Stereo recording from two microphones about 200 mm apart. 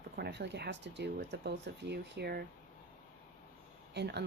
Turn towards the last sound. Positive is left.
turn(degrees=-55)  # may be behind; listen again after turning